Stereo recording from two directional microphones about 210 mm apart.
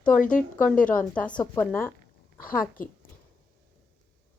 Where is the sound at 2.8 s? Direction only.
40° left (ahead or behind).